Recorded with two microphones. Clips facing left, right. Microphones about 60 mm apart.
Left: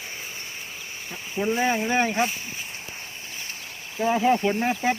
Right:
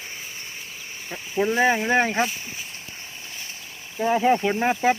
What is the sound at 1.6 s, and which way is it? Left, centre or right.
Speech, right.